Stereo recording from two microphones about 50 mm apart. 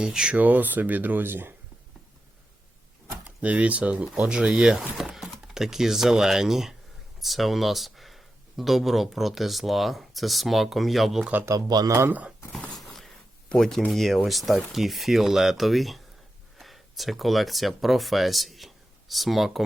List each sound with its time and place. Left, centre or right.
0.0 s speech: centre
0.3 s speech: right
3.2 s speech: right
4.1 s speech: centre
4.9 s a sound: centre
5.5 s speech: centre
12.0 s speech: right
12.7 s a sound: centre
13.6 s speech: centre